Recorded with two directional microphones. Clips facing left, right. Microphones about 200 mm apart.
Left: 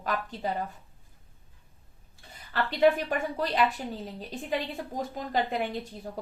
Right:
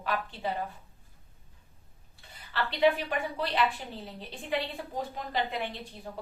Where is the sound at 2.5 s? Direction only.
45° left (ahead or behind).